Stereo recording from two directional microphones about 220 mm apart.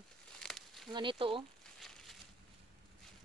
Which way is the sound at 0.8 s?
20° right (ahead or behind).